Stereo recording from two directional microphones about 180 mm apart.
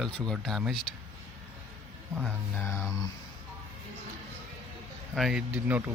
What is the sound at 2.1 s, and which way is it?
Speech, 5° left (ahead or behind).